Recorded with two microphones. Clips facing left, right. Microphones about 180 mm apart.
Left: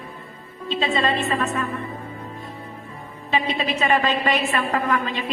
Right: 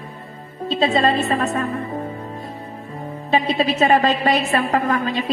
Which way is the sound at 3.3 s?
40° right (ahead or behind).